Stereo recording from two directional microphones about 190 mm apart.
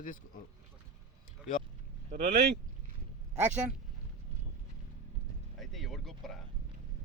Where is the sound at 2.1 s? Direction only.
35° right (ahead or behind).